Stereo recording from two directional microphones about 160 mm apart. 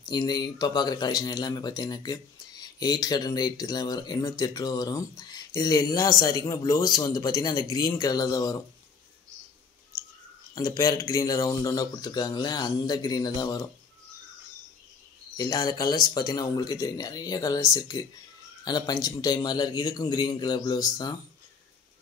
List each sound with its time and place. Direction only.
0.1 s speech: 25° left (ahead or behind)
10.5 s speech: 25° left (ahead or behind)
15.3 s speech: 25° left (ahead or behind)